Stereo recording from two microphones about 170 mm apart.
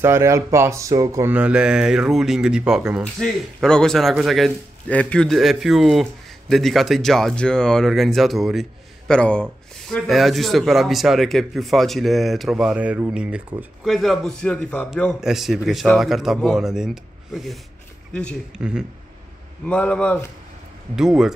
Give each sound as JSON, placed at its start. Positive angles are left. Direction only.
{"t": 0.0, "sound": "speech", "side_deg": -15}
{"t": 1.3, "sound": "speech", "side_deg": -5}
{"t": 18.6, "sound": "speech", "side_deg": -5}
{"t": 19.6, "sound": "speech", "side_deg": 10}
{"t": 20.9, "sound": "speech", "side_deg": -5}